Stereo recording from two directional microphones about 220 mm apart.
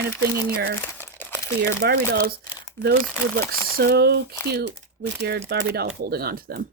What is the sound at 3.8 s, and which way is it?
Speech, 45° right (ahead or behind).